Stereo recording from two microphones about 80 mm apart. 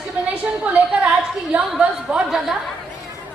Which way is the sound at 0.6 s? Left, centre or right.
Centre.